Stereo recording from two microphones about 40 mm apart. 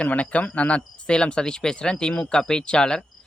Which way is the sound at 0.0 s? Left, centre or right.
Left.